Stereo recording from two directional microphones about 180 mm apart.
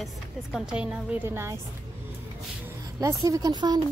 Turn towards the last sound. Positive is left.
turn(degrees=-25)  # may be behind; listen again after turning